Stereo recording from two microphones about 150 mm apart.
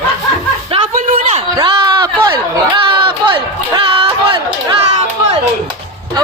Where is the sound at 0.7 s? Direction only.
40° right (ahead or behind).